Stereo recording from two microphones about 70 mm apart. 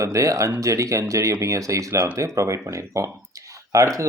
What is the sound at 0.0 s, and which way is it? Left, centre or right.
Speech, right.